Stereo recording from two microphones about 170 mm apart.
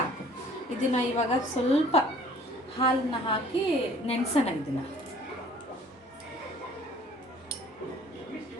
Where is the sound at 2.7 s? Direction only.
30° left (ahead or behind).